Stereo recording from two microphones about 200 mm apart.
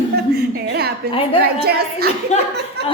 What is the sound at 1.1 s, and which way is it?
Speech, 25° left (ahead or behind).